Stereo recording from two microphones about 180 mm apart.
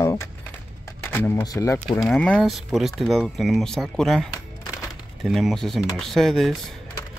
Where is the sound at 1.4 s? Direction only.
20° left (ahead or behind).